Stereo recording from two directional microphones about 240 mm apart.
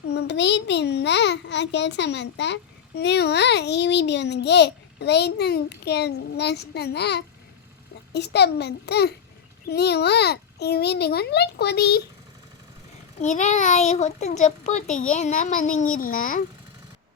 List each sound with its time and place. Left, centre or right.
0.1 s a child's voice: left
13.1 s a child's voice: left